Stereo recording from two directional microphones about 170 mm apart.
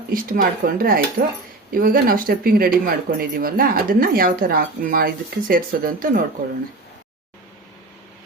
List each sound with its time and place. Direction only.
0.1 s speech: 55° right (ahead or behind)